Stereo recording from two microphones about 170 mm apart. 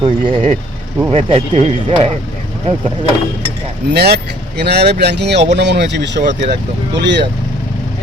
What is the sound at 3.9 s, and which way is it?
Speech, 70° right (ahead or behind).